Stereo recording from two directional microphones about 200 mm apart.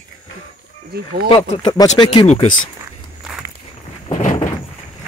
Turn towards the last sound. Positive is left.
turn(degrees=40)  # may be behind; listen again after turning